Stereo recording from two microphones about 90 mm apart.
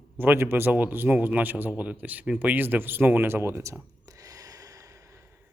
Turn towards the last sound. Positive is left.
turn(degrees=-40)  # may be behind; listen again after turning